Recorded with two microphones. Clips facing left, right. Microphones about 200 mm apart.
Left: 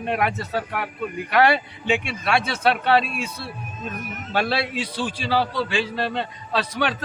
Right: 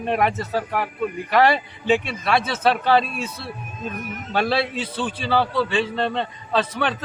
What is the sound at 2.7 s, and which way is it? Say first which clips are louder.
Speech: right 1 dB; centre (ahead or behind).